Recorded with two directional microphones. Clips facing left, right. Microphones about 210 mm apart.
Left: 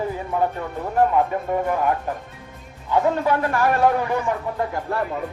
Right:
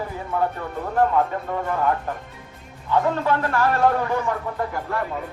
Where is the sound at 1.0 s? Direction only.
15° left (ahead or behind).